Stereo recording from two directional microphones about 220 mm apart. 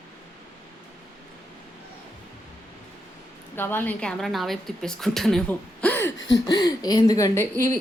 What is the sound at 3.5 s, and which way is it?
A woman's voice, 10° left (ahead or behind).